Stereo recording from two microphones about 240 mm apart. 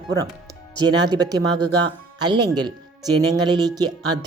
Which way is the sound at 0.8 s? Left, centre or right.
Centre.